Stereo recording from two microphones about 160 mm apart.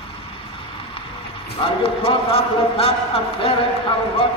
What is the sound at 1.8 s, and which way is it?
A man's voice, 35° left (ahead or behind).